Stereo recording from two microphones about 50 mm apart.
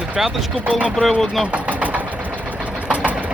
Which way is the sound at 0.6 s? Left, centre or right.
Right.